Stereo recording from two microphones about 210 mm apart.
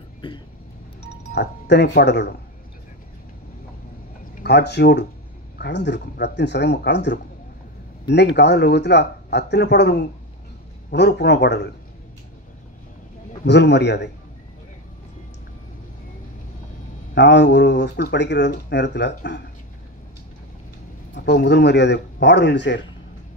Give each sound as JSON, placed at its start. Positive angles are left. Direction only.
{"t": 0.2, "sound": "speech", "side_deg": 25}
{"t": 1.3, "sound": "speech", "side_deg": 55}
{"t": 4.4, "sound": "speech", "side_deg": 55}
{"t": 13.5, "sound": "speech", "side_deg": 55}
{"t": 17.1, "sound": "speech", "side_deg": 55}
{"t": 21.1, "sound": "speech", "side_deg": 50}